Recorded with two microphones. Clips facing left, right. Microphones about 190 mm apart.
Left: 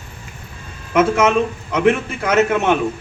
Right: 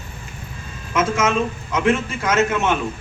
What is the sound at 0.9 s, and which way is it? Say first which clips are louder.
A man's voice: left 5 dB; 60° left (ahead or behind).